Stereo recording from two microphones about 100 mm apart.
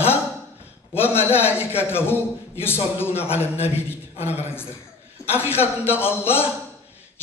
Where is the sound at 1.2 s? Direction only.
20° left (ahead or behind).